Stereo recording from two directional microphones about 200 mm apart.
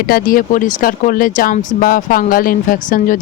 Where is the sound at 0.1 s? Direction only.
45° left (ahead or behind).